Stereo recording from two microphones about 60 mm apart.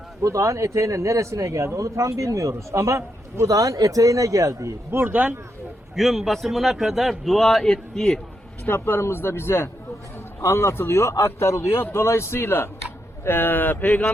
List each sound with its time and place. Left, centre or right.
0.2 s speech: right
4.9 s speech: right
5.1 s speech: right
6.0 s a man's voice: centre
8.6 s speech: left